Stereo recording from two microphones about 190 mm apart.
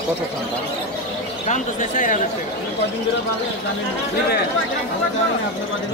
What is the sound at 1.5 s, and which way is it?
Speech, 40° left (ahead or behind).